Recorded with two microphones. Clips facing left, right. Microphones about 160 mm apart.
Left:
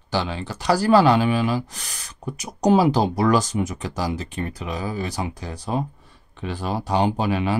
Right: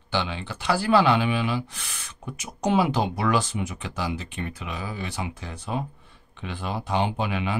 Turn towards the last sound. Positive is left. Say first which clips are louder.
# left 5 dB
turn(degrees=40)  # may be behind; listen again after turning